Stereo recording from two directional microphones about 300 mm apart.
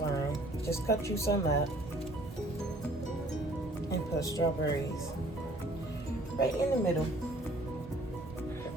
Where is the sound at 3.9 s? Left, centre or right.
Centre.